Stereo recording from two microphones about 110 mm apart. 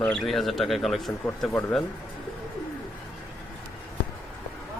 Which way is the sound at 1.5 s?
20° left (ahead or behind).